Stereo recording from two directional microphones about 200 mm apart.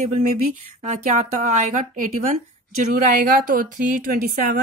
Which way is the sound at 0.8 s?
35° right (ahead or behind).